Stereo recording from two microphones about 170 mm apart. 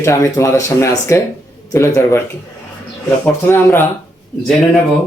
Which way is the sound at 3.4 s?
15° left (ahead or behind).